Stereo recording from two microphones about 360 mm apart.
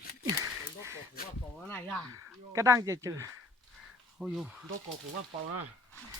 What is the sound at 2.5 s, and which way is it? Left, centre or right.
Speech, centre.